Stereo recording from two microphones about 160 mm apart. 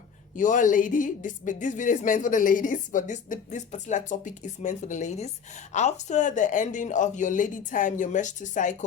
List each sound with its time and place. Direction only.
0.3 s speech: 55° left (ahead or behind)